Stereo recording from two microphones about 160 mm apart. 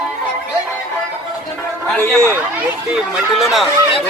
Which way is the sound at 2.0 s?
15° right (ahead or behind).